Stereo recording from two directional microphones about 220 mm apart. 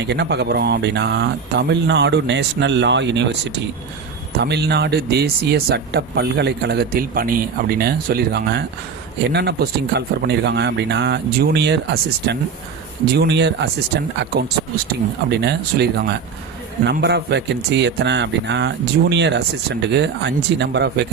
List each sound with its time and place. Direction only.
0.0 s speech: 50° right (ahead or behind)